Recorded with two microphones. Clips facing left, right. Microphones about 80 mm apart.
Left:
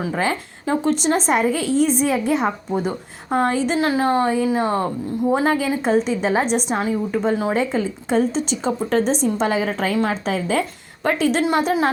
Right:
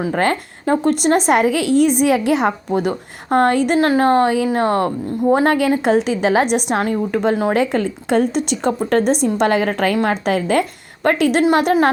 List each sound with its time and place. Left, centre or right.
0.1 s speech: right
5.8 s a woman's voice: right